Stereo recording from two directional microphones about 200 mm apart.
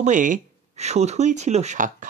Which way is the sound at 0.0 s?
40° right (ahead or behind).